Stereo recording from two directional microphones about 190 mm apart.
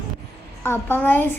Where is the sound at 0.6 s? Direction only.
10° left (ahead or behind).